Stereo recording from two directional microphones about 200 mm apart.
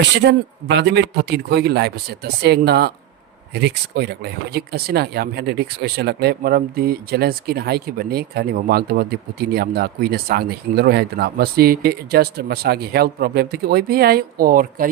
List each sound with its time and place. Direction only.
0.2 s speech: 60° right (ahead or behind); by 14.8 s 45° right (ahead or behind)